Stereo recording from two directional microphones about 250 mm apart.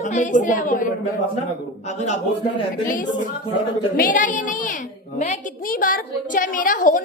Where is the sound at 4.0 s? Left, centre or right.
Left.